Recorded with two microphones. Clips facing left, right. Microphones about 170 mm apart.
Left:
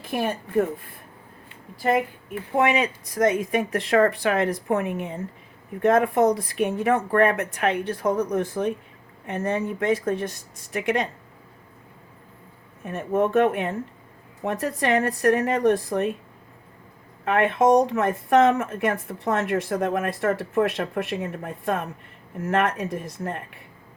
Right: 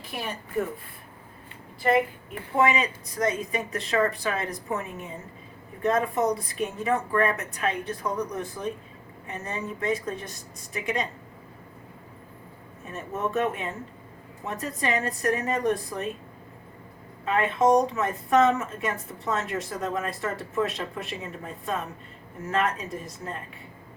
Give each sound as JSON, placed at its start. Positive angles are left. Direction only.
{"t": 0.1, "sound": "a woman's voice", "side_deg": 50}
{"t": 2.6, "sound": "speech", "side_deg": 60}
{"t": 12.8, "sound": "speech", "side_deg": 55}
{"t": 17.2, "sound": "speech", "side_deg": 60}